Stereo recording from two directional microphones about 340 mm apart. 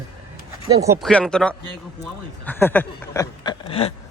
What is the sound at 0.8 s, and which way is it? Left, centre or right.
Speech, centre.